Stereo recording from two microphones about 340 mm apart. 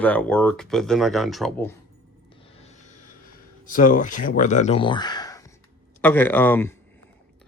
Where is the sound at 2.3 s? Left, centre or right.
Centre.